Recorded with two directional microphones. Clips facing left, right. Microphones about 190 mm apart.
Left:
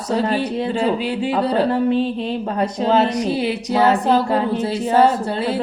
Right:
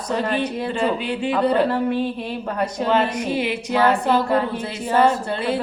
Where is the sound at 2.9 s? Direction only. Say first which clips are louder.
Left 4 dB; 35° left (ahead or behind).